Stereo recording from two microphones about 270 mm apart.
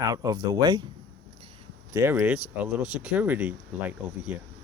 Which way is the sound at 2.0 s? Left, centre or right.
Centre.